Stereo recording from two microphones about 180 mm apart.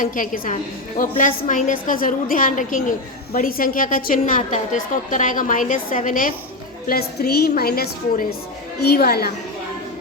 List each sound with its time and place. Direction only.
0.0 s a woman's voice: 45° left (ahead or behind)
6.8 s a woman's voice: 60° left (ahead or behind)